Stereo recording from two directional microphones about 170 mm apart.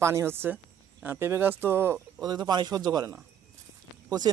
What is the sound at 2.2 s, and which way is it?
Speech, 25° right (ahead or behind).